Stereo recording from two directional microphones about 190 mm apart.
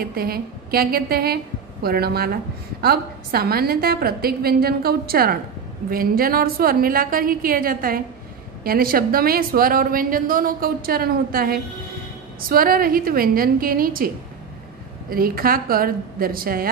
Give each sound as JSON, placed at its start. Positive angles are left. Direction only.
{"t": 0.0, "sound": "a woman's voice", "side_deg": -50}